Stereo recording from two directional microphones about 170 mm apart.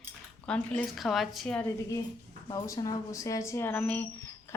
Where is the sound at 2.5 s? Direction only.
20° left (ahead or behind).